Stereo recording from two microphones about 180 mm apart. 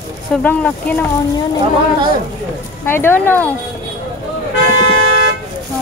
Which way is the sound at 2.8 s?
10° left (ahead or behind).